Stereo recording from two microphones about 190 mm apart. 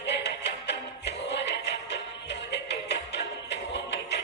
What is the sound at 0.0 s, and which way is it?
Music, 65° left (ahead or behind).